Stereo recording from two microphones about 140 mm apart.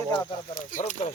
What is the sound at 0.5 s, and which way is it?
Speech, 70° left (ahead or behind).